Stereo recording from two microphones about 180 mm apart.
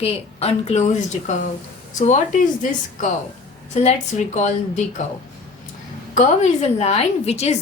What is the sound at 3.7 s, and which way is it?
Speech, 40° left (ahead or behind).